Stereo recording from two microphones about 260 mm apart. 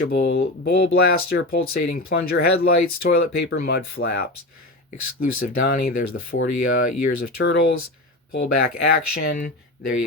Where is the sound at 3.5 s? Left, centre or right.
Left.